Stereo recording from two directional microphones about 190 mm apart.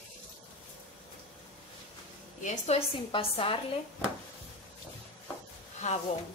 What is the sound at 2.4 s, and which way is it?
A woman's voice, 35° left (ahead or behind).